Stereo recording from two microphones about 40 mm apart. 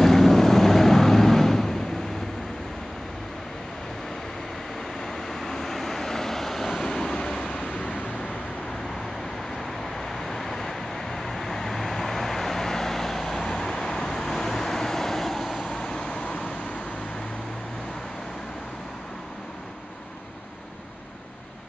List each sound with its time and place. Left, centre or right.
0.0 s vehicle: centre
5.0 s vehicle: centre; by 8.0 s left
9.9 s vehicle: centre
15.7 s vehicle: centre